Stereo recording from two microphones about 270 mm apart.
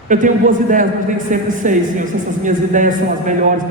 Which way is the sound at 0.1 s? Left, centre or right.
Right.